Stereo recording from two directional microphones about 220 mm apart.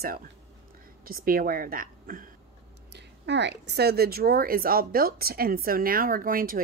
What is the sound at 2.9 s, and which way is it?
Speech, 50° right (ahead or behind).